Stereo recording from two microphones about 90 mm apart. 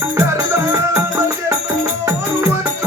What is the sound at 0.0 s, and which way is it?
Music, 25° right (ahead or behind).